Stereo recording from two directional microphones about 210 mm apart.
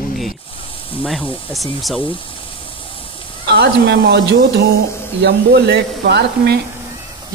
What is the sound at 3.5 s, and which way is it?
Speech, 50° right (ahead or behind).